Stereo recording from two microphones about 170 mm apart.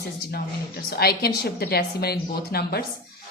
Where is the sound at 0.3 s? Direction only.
65° left (ahead or behind).